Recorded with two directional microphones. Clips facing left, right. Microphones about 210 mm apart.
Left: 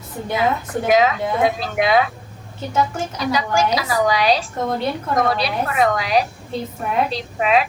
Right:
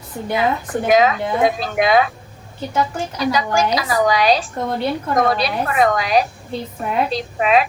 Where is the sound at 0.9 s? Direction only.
45° right (ahead or behind).